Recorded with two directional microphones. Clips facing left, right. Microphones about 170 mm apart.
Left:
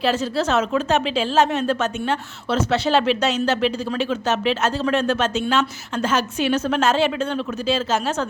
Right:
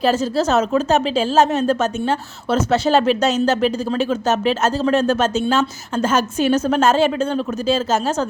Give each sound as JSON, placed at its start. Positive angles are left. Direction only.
{"t": 0.0, "sound": "speech", "side_deg": -45}